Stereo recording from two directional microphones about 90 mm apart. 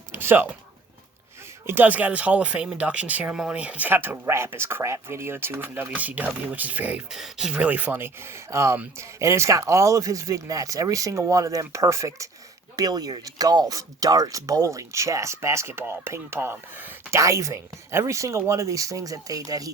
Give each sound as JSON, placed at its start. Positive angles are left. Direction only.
{"t": 0.1, "sound": "a sound", "side_deg": -25}
{"t": 1.6, "sound": "speech", "side_deg": -20}
{"t": 3.3, "sound": "speech", "side_deg": -5}
{"t": 3.6, "sound": "speech", "side_deg": -15}
{"t": 7.1, "sound": "speech", "side_deg": -5}
{"t": 7.5, "sound": "speech", "side_deg": -15}
{"t": 17.2, "sound": "speech", "side_deg": -35}